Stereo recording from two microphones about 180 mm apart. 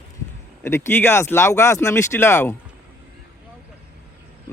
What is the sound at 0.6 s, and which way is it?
Speech, 15° left (ahead or behind).